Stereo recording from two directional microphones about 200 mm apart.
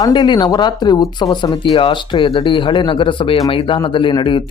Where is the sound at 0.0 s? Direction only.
20° left (ahead or behind).